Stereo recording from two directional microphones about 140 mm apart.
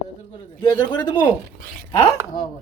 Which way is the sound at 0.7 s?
10° left (ahead or behind).